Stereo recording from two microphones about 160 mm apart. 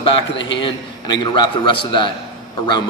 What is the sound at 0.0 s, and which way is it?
A man's voice, 30° left (ahead or behind).